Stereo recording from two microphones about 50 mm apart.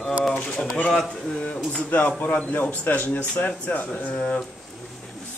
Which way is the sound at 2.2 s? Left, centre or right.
Left.